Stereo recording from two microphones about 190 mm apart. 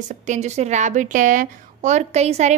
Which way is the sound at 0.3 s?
35° right (ahead or behind).